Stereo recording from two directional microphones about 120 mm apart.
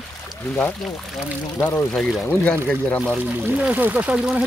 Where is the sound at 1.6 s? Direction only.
15° left (ahead or behind).